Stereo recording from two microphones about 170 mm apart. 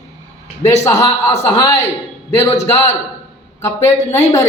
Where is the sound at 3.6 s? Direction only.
15° left (ahead or behind).